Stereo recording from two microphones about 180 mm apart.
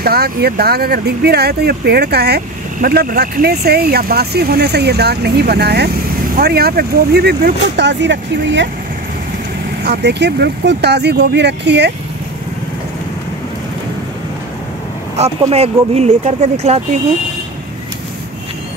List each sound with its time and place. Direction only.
0.0 s speech: 60° right (ahead or behind); by 8.6 s 80° right
9.8 s speech: 70° right (ahead or behind)
15.1 s speech: 35° right (ahead or behind)